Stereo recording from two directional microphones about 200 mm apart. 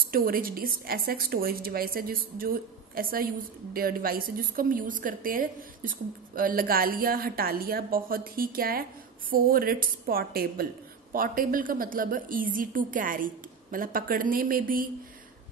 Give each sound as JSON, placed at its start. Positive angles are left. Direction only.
{"t": 0.1, "sound": "a woman's voice", "side_deg": -45}